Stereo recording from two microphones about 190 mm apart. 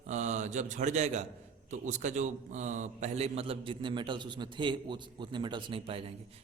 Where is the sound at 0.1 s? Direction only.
40° right (ahead or behind).